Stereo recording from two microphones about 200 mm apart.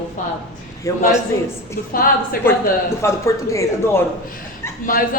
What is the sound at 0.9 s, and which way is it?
Speech, 15° left (ahead or behind).